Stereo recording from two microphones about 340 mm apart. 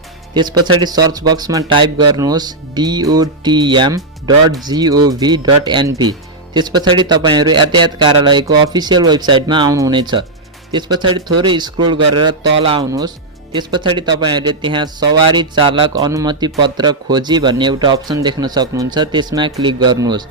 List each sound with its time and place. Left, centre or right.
0.3 s a man's voice: centre